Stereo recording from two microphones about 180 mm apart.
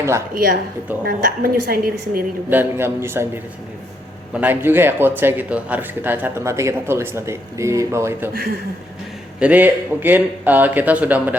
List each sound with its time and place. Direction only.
1.0 s a woman's voice: 50° right (ahead or behind)
2.5 s speech: 10° right (ahead or behind)
8.3 s a woman's voice: 55° right (ahead or behind)
9.4 s speech: 10° right (ahead or behind)